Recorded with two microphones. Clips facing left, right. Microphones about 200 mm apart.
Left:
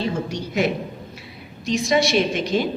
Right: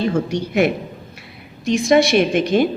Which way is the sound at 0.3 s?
60° right (ahead or behind).